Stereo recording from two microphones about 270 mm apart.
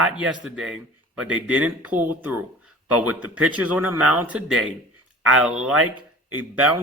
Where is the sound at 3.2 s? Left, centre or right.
Right.